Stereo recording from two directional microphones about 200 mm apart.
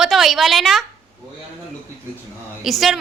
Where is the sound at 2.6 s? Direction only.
Centre (ahead or behind).